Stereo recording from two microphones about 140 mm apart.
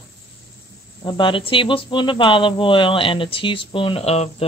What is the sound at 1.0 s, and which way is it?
A woman's voice, 35° left (ahead or behind).